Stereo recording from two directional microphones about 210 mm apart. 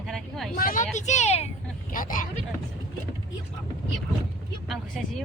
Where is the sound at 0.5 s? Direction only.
45° left (ahead or behind).